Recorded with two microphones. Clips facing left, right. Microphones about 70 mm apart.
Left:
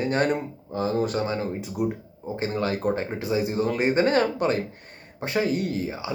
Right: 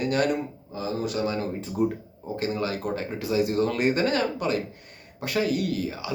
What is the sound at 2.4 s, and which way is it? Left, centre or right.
Speech, left.